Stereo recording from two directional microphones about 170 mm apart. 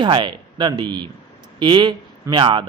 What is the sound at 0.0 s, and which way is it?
A man's voice, 30° right (ahead or behind).